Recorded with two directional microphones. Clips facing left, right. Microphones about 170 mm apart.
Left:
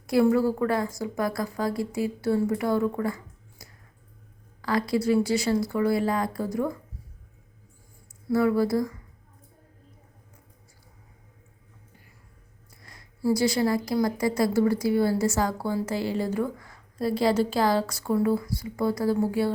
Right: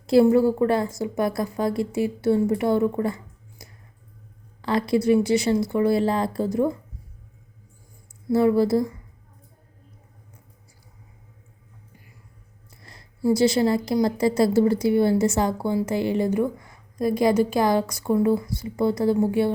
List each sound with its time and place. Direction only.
0.1 s a woman's voice: 25° right (ahead or behind)
3.6 s a sound: 20° right (ahead or behind)
4.6 s a woman's voice: 25° right (ahead or behind)
8.3 s a woman's voice: 25° right (ahead or behind)
12.8 s a woman's voice: 30° right (ahead or behind)